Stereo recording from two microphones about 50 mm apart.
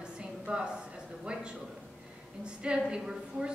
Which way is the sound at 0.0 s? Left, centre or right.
Centre.